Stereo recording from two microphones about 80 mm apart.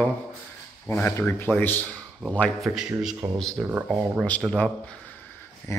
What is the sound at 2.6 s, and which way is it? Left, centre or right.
Speech, centre.